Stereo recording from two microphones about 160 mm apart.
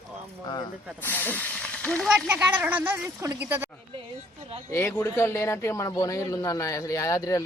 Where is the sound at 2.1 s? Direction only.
10° right (ahead or behind).